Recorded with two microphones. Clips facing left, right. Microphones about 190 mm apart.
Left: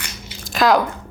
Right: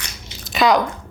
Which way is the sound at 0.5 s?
Centre (ahead or behind).